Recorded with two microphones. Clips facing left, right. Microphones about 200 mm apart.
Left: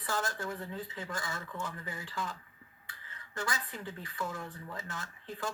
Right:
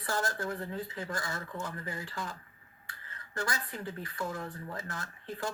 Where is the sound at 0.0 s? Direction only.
40° right (ahead or behind).